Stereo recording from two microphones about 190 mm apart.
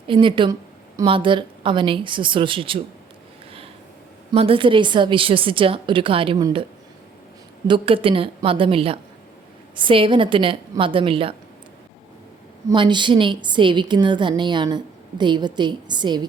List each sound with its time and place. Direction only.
0.1 s a woman's voice: 25° right (ahead or behind)
4.3 s a woman's voice: 30° right (ahead or behind)
7.7 s a woman's voice: 30° right (ahead or behind)
12.6 s a woman's voice: 25° right (ahead or behind)